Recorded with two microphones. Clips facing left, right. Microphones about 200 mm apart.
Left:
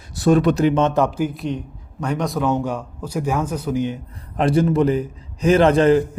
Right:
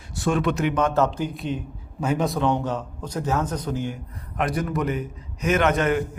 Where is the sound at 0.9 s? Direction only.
10° left (ahead or behind).